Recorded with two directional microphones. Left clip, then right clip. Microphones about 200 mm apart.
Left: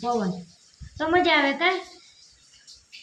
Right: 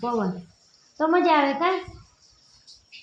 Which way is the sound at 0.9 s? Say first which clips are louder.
Right 1 dB; 90° left.